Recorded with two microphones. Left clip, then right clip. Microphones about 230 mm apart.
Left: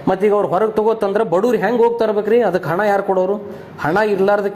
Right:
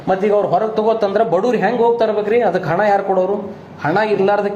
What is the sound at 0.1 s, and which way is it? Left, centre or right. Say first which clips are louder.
A woman's voice: right 1 dB; left.